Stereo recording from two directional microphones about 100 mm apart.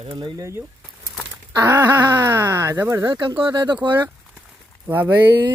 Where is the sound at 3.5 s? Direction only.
50° right (ahead or behind).